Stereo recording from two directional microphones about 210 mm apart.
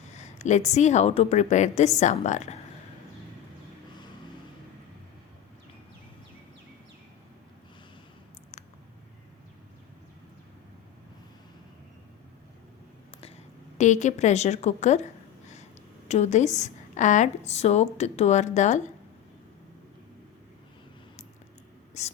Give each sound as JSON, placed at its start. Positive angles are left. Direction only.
{"t": 0.1, "sound": "a woman's voice", "side_deg": 35}
{"t": 13.2, "sound": "a woman's voice", "side_deg": 35}
{"t": 16.0, "sound": "a woman's voice", "side_deg": 35}
{"t": 22.0, "sound": "a sound", "side_deg": 30}